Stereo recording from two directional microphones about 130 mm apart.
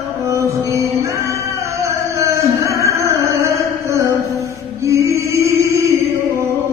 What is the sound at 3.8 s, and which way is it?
Chant, 25° right (ahead or behind).